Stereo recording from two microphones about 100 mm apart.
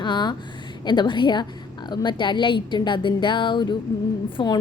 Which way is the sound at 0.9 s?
50° left (ahead or behind).